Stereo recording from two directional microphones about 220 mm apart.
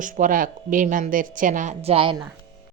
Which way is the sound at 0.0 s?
35° right (ahead or behind).